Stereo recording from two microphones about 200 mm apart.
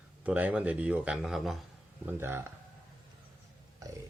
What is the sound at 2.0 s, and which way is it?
Speech, 10° right (ahead or behind).